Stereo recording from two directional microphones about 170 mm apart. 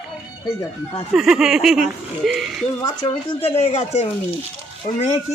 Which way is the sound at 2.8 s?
30° left (ahead or behind).